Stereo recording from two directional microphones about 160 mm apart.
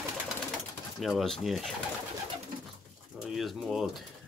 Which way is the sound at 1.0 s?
Centre (ahead or behind).